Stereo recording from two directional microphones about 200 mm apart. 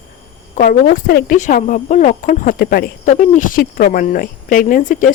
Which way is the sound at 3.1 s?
40° left (ahead or behind).